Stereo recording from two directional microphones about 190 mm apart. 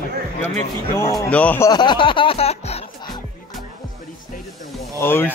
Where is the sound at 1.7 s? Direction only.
25° left (ahead or behind).